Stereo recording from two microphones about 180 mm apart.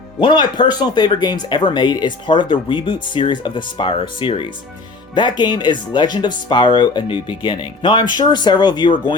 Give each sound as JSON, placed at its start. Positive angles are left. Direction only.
{"t": 0.2, "sound": "speech", "side_deg": 25}